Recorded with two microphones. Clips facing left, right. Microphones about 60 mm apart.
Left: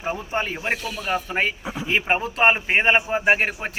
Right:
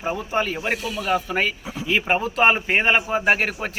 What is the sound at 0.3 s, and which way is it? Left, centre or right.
Speech, left.